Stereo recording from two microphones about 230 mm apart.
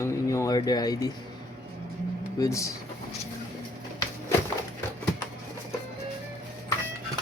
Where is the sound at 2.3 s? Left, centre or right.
Centre.